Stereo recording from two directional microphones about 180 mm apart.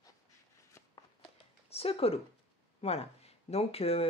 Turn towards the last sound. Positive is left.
turn(degrees=35)  # may be behind; listen again after turning